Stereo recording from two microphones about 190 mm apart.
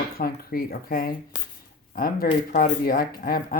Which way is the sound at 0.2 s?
50° left (ahead or behind).